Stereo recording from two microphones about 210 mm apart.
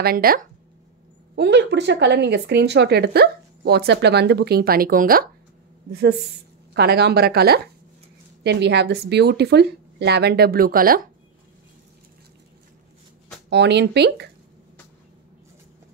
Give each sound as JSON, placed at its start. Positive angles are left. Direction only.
{"t": 0.0, "sound": "speech", "side_deg": -45}
{"t": 1.3, "sound": "speech", "side_deg": -55}
{"t": 13.5, "sound": "speech", "side_deg": -55}